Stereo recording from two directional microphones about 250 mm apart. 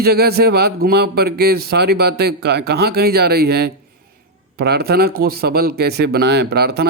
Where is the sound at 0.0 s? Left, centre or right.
Right.